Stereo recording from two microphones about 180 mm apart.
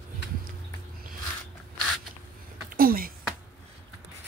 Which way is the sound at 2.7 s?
55° right (ahead or behind).